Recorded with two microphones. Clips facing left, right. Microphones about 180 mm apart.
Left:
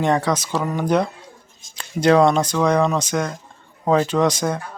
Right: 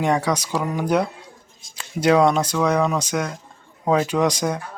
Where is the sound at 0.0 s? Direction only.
10° right (ahead or behind).